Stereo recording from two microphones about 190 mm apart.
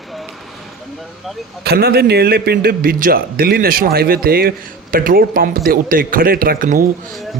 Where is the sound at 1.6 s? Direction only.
55° right (ahead or behind).